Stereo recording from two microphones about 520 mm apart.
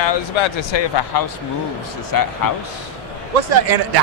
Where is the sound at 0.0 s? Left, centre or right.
Left.